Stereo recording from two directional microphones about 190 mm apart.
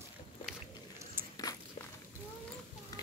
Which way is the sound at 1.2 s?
10° right (ahead or behind).